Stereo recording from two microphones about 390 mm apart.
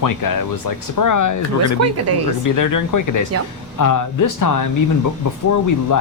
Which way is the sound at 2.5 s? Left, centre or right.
Left.